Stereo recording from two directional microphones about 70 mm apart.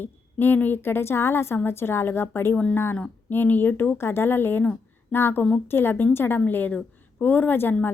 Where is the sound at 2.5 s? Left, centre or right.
Centre.